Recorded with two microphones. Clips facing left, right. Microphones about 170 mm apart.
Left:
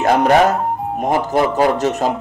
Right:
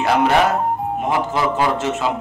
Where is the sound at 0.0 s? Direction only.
45° left (ahead or behind).